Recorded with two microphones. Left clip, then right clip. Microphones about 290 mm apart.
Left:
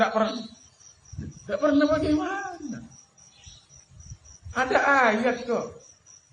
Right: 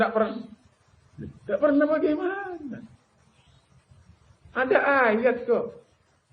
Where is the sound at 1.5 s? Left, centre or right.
Left.